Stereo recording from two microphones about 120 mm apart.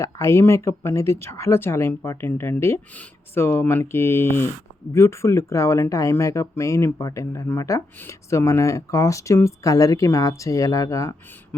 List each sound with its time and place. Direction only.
0.0 s speech: 25° left (ahead or behind)